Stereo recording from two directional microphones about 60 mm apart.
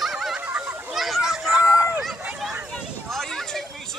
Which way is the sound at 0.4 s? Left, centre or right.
Right.